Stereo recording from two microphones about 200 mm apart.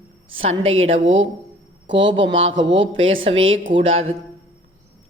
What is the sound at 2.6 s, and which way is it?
Speech, 70° right (ahead or behind).